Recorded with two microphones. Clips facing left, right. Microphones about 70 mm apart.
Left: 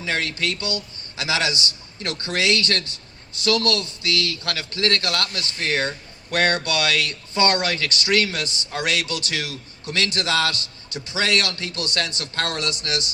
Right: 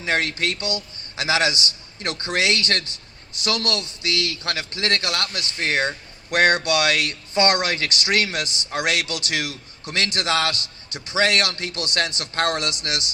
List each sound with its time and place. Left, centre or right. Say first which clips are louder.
0.0 s a man's voice: right 2 dB; right